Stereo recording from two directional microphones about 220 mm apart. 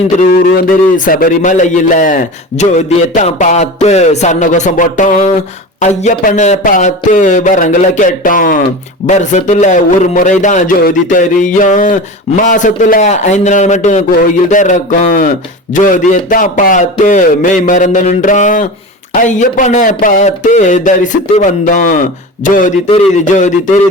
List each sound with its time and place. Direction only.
0.2 s a man's voice: 40° left (ahead or behind)